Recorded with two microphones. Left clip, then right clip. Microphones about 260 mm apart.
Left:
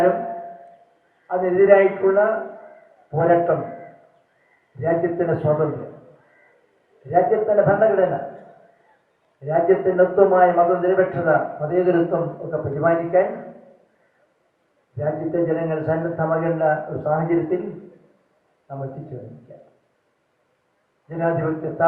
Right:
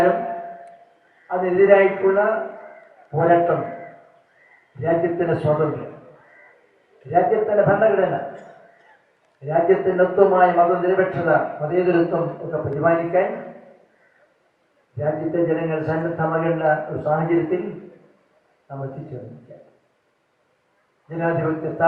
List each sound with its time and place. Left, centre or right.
0.0 s a sound: centre
1.3 s a man's voice: centre
14.9 s a man's voice: centre
21.1 s a man's voice: centre